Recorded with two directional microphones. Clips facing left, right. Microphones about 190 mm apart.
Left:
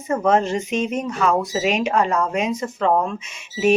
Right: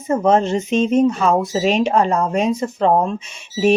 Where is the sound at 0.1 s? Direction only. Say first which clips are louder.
Right 3 dB; 25° right (ahead or behind).